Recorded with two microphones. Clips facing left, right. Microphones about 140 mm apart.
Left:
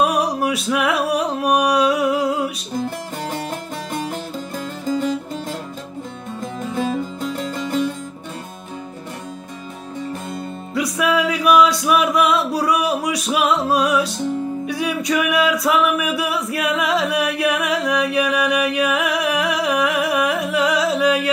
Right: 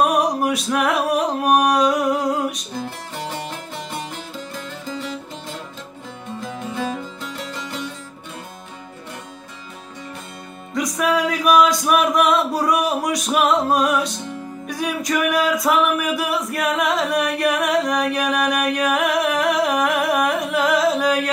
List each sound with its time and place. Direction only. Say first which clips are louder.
0.0 s music: even; centre (ahead or behind)
1.8 s a sound: left 1 dB; 5° left (ahead or behind)
4.8 s music: left 10 dB; 45° left (ahead or behind)
7.5 s music: left 11 dB; 45° left (ahead or behind)
10.7 s music: even; 5° left (ahead or behind)